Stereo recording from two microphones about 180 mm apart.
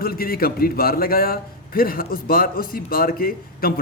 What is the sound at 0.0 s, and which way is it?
A man's voice, 55° left (ahead or behind).